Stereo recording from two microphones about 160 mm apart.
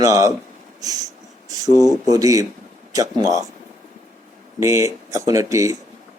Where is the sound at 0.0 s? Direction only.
20° right (ahead or behind).